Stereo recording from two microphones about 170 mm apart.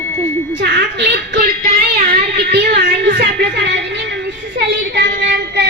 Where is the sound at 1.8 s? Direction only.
60° right (ahead or behind).